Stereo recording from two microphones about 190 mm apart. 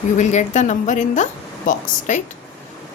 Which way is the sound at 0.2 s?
40° left (ahead or behind).